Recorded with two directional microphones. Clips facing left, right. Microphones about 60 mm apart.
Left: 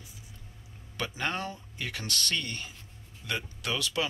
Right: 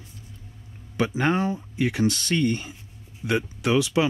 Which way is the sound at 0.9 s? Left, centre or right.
Right.